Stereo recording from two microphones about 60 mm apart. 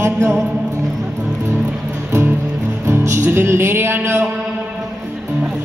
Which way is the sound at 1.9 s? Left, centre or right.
Right.